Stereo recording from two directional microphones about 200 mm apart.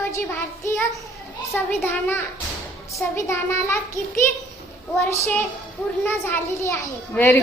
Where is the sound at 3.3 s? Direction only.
15° left (ahead or behind).